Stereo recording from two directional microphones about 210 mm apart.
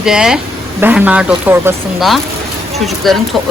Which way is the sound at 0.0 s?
5° right (ahead or behind).